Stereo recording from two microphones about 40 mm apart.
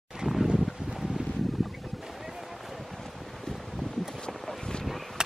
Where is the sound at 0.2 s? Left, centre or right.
Right.